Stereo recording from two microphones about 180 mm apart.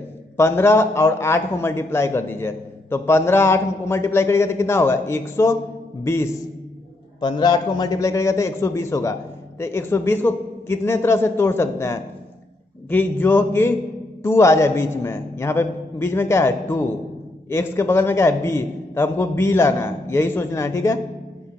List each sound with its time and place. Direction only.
0.4 s a man's voice: 15° left (ahead or behind)
7.2 s a man's voice: 25° left (ahead or behind)